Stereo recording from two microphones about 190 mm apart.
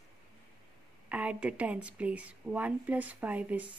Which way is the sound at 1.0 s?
5° right (ahead or behind).